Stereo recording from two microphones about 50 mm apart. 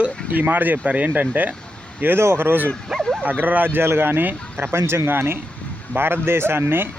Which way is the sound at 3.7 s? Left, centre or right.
Right.